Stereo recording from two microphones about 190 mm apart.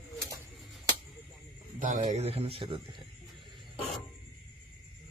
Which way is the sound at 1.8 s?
40° right (ahead or behind).